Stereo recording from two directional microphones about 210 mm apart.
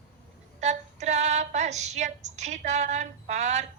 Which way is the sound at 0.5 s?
35° right (ahead or behind).